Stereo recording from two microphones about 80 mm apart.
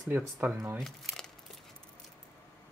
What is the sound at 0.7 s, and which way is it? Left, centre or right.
Speech, centre.